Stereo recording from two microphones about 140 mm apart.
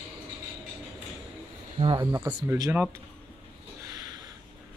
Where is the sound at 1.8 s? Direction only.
35° right (ahead or behind).